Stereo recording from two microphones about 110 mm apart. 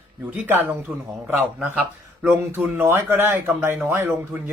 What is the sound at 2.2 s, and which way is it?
A man's voice, 20° right (ahead or behind).